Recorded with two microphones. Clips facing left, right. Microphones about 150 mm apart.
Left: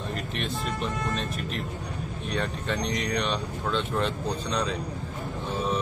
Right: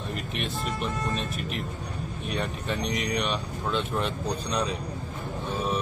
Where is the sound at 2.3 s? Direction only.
10° right (ahead or behind).